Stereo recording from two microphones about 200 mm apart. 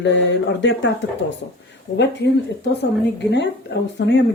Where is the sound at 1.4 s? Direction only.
55° left (ahead or behind).